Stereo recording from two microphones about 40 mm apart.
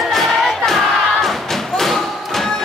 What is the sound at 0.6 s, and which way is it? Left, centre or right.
Thump, centre.